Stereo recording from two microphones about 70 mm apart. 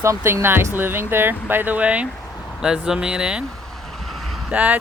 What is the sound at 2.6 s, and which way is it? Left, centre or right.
Speech, centre.